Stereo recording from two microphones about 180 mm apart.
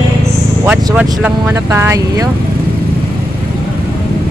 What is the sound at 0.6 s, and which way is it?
Speech, 5° right (ahead or behind).